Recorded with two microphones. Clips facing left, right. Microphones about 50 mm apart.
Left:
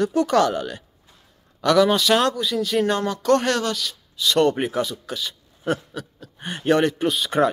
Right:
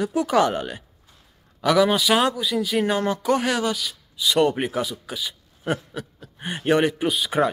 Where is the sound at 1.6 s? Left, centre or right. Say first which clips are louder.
Left 1 dB; centre.